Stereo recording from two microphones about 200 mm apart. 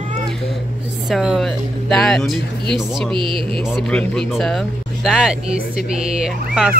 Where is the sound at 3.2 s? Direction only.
25° right (ahead or behind).